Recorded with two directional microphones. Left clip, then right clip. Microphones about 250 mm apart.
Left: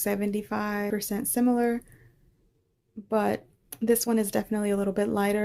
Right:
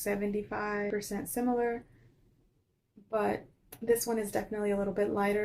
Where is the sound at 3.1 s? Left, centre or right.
Left.